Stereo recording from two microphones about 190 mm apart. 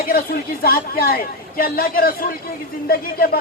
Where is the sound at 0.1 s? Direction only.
50° left (ahead or behind).